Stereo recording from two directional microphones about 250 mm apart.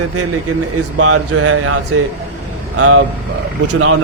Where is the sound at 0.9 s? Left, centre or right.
Right.